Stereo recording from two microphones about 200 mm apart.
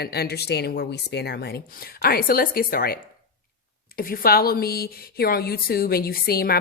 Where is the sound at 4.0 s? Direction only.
45° left (ahead or behind).